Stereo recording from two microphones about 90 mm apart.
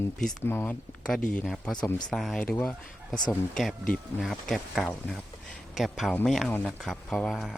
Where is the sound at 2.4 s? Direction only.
15° left (ahead or behind).